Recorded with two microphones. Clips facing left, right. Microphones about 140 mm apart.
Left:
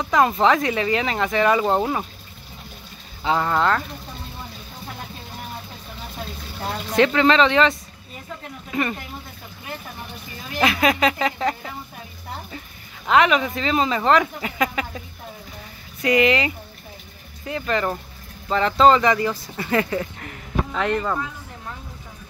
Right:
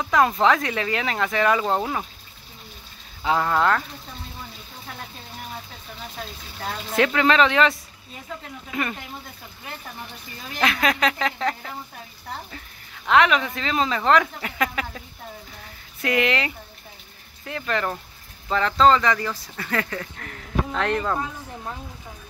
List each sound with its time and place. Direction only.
0.0 s speech: centre (ahead or behind)
3.3 s speech: centre (ahead or behind)
7.0 s speech: centre (ahead or behind)
10.6 s speech: 5° left (ahead or behind)
13.0 s speech: centre (ahead or behind)
18.7 s speech: 15° left (ahead or behind)
20.2 s speech: 5° left (ahead or behind)